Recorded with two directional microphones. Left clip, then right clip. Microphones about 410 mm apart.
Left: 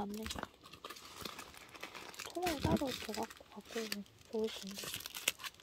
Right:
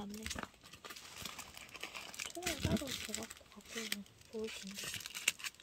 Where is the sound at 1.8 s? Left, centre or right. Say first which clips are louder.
Right 2 dB; centre.